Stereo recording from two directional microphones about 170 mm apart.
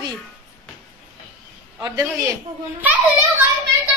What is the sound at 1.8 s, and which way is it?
Speech, 20° right (ahead or behind).